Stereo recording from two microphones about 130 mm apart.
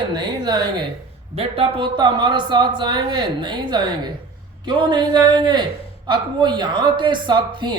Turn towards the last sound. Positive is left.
turn(degrees=-35)  # may be behind; listen again after turning